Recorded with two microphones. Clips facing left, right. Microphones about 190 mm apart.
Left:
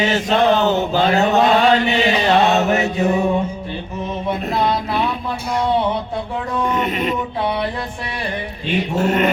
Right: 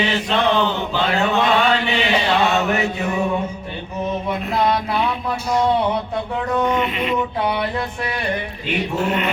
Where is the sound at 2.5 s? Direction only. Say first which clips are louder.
Left 3 dB; 40° left (ahead or behind).